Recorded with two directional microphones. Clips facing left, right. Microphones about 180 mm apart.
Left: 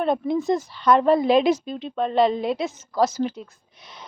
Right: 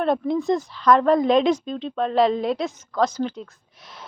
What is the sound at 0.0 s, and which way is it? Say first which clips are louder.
Speech: right 1 dB; centre (ahead or behind).